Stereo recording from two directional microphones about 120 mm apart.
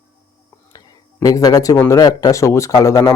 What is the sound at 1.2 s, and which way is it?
Speech, 30° left (ahead or behind).